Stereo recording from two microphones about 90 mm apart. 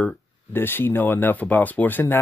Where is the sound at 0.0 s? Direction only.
20° left (ahead or behind).